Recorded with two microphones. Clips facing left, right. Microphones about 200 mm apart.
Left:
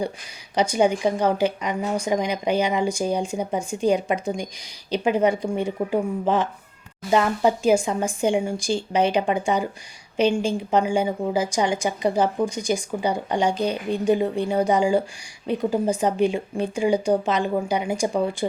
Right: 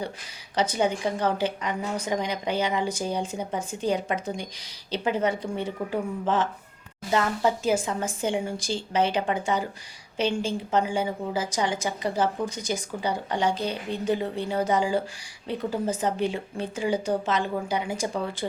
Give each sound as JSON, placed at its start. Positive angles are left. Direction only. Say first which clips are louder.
{"t": 0.5, "sound": "a woman's voice", "louder": "left 5 dB", "side_deg": 10}